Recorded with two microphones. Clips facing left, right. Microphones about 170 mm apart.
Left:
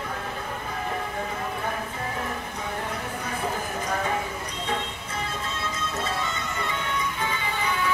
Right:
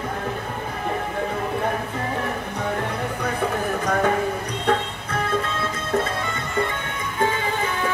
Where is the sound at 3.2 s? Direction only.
65° right (ahead or behind).